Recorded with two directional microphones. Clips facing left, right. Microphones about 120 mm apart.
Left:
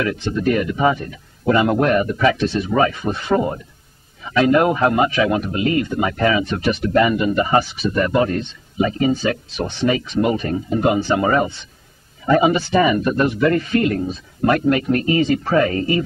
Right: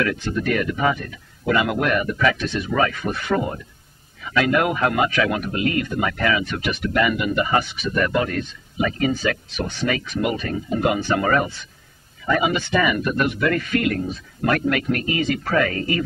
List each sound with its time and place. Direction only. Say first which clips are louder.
0.0 s speech: left 3 dB; 25° left (ahead or behind)
12.3 s speech: left 5 dB; 35° left (ahead or behind)